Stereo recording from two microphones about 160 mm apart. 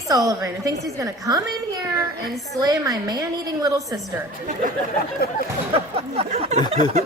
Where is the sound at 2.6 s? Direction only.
25° right (ahead or behind).